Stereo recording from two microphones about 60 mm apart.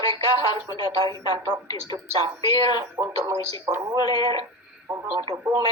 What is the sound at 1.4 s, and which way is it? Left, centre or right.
Speech, right.